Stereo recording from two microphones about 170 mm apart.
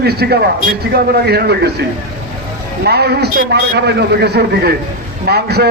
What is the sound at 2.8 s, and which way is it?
A man's voice, 70° right (ahead or behind).